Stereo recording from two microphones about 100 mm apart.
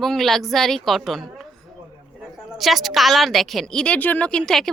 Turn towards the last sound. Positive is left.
turn(degrees=5)  # may be behind; listen again after turning